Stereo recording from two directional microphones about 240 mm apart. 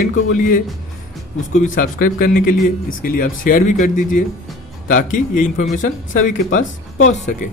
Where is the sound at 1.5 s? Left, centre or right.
Left.